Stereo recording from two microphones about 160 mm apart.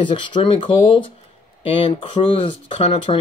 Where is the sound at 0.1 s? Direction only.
30° left (ahead or behind).